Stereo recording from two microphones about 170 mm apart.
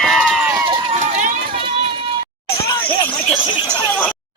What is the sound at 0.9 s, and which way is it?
Run, 45° right (ahead or behind).